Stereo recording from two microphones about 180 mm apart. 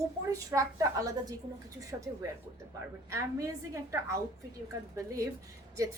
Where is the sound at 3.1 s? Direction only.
15° right (ahead or behind).